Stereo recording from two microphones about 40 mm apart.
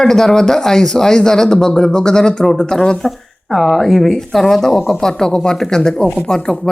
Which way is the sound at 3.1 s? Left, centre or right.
Centre.